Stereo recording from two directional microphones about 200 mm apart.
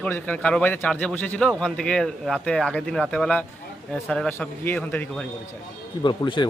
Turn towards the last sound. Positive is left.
turn(degrees=25)  # may be behind; listen again after turning